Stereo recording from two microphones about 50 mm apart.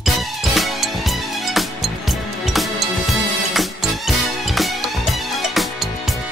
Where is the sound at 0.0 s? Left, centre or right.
Centre.